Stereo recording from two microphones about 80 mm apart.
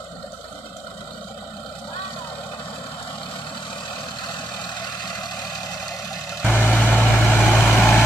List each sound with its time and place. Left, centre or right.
6.4 s vehicle: left
7.3 s vehicle: centre